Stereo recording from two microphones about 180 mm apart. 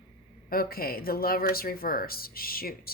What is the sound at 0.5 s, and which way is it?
A woman's voice, 55° left (ahead or behind).